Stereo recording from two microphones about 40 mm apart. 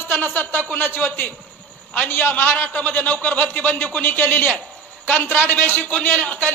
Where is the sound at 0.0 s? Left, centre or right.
Left.